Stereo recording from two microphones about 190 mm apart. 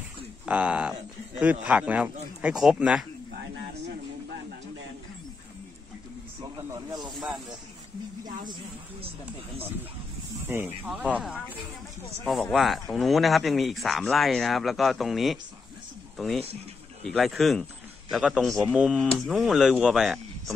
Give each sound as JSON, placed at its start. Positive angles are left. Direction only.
{"t": 0.5, "sound": "speech", "side_deg": -5}
{"t": 6.4, "sound": "a sound", "side_deg": -20}
{"t": 10.9, "sound": "speech", "side_deg": -5}